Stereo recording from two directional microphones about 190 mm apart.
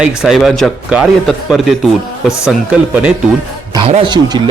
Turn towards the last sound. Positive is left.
turn(degrees=-25)  # may be behind; listen again after turning